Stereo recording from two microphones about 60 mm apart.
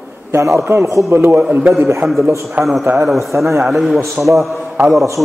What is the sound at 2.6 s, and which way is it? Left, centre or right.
Speech, right.